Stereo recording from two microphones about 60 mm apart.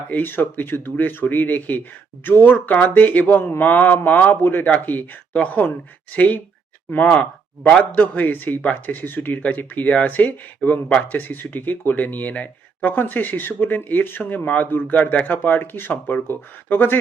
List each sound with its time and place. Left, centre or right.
0.1 s speech: left
7.7 s speech: left
8.0 s speech: left